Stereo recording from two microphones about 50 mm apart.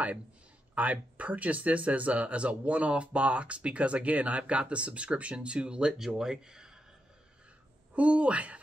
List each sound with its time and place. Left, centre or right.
0.7 s speech: right; by 6.8 s centre
7.9 s speech: right